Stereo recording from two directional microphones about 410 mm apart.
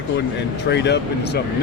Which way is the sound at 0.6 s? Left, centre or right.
Left.